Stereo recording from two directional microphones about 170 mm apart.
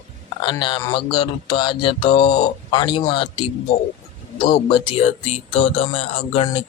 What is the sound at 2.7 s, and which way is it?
Speech, 30° left (ahead or behind).